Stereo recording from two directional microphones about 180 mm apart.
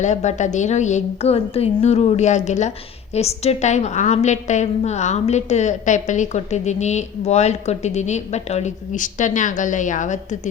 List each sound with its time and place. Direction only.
0.0 s a woman's voice: 40° left (ahead or behind)